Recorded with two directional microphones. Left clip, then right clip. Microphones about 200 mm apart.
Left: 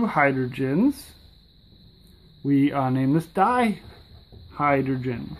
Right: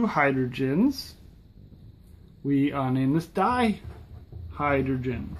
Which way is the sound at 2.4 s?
20° left (ahead or behind).